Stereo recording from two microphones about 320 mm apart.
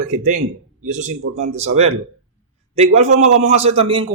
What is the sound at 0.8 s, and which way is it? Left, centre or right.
A man's voice, right.